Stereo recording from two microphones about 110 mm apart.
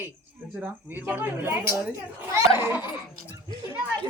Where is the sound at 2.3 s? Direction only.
25° right (ahead or behind).